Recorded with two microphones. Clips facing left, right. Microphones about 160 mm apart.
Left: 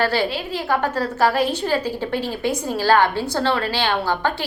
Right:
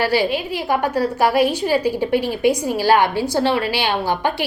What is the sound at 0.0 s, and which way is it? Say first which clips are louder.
A woman's voice: right 2 dB; 10° right (ahead or behind).